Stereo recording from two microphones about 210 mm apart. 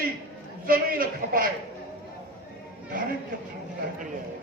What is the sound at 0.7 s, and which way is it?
Speech, 40° right (ahead or behind).